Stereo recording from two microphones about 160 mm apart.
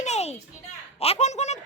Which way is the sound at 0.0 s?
45° left (ahead or behind).